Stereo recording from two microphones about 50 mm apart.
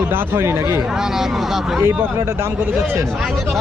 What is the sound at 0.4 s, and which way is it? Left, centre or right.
Speech, right.